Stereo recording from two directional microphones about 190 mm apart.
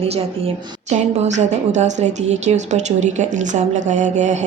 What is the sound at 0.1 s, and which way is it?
A woman's voice, 35° right (ahead or behind).